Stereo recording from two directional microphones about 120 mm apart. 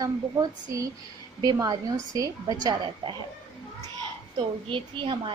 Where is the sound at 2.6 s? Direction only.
40° right (ahead or behind).